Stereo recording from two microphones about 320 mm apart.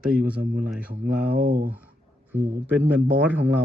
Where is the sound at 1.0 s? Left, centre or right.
Right.